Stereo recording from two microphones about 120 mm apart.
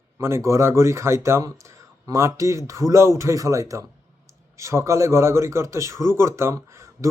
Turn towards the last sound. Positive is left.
turn(degrees=-25)  # may be behind; listen again after turning